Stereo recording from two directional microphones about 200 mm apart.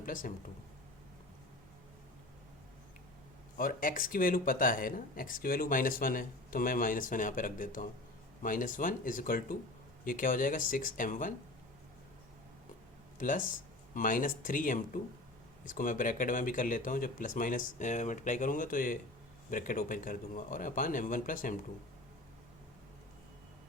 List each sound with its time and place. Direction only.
0.0 s speech: 40° left (ahead or behind)
3.6 s speech: 45° left (ahead or behind)
13.1 s speech: 40° left (ahead or behind)